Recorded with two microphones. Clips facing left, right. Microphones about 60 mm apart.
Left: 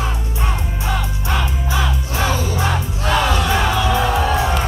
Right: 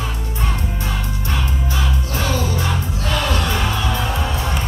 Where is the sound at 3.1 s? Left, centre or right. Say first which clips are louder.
Left 4 dB; centre.